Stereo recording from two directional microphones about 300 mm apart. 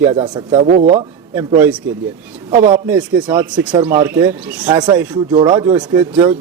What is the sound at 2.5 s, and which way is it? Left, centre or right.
A man's voice, centre.